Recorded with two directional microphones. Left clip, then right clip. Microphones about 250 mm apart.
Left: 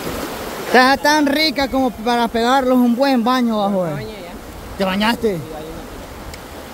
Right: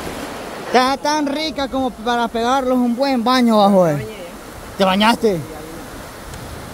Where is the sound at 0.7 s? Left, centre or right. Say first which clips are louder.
Left 3 dB; centre.